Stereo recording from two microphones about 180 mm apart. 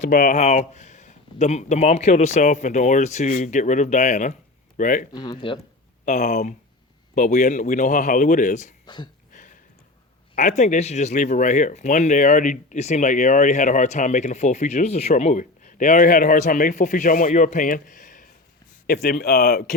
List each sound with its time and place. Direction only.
0.0 s speech: 50° left (ahead or behind)
5.1 s speech: 25° left (ahead or behind)
6.1 s speech: 40° left (ahead or behind)
9.3 s a sound: 45° left (ahead or behind)
10.3 s speech: 45° left (ahead or behind)